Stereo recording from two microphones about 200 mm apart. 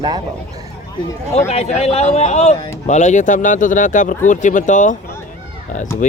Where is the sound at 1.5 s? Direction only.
35° left (ahead or behind).